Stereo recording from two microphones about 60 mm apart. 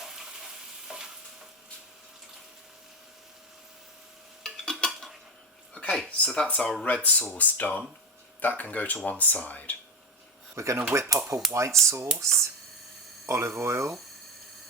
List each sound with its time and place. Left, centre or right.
0.0 s stir: centre
4.4 s stir: centre
5.7 s a sound: centre
6.1 s speech: centre
6.8 s speech: left
10.5 s speech: right